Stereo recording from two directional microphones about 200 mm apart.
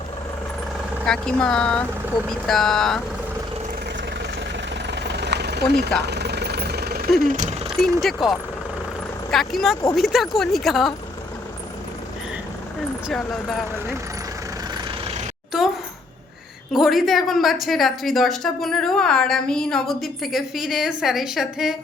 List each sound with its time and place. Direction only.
1.0 s speech: 5° left (ahead or behind)
4.9 s vehicle: 60° right (ahead or behind)
7.2 s speech: 40° right (ahead or behind)
8.0 s speech: centre (ahead or behind)
13.1 s speech: centre (ahead or behind)
14.7 s vehicle: 25° right (ahead or behind)
16.7 s speech: centre (ahead or behind)